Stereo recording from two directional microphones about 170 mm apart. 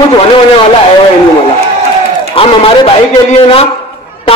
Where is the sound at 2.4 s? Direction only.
30° left (ahead or behind).